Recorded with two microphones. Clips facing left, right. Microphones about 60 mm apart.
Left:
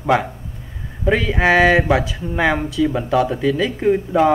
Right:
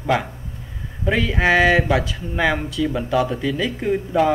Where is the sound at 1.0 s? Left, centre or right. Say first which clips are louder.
Left 2 dB; centre.